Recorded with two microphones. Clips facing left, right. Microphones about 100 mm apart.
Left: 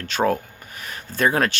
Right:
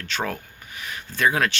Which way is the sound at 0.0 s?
40° left (ahead or behind).